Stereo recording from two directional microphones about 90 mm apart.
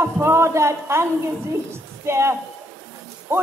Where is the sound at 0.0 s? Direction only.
30° right (ahead or behind).